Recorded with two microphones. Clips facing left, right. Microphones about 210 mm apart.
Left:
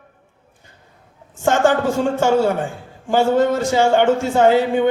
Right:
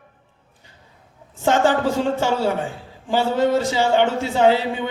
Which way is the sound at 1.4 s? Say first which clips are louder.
Left 2 dB; 45° left (ahead or behind).